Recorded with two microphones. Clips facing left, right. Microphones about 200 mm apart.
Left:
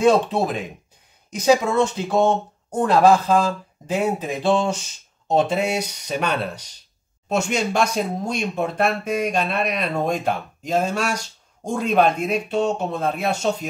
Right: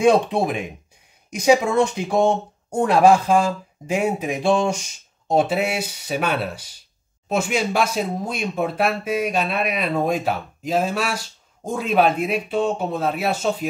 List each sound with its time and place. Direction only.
0.0 s speech: 15° right (ahead or behind)